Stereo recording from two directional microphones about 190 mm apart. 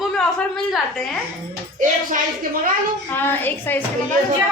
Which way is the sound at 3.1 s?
10° left (ahead or behind).